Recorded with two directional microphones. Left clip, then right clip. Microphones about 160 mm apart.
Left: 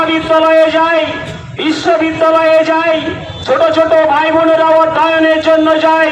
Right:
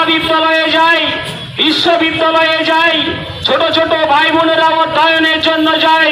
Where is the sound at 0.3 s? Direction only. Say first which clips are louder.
Left 5 dB; 45° left (ahead or behind).